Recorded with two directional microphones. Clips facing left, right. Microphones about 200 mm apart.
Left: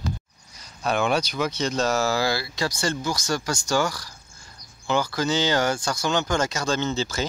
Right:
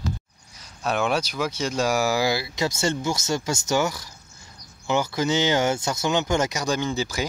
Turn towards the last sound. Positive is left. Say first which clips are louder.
# even
turn(degrees=-15)  # may be behind; listen again after turning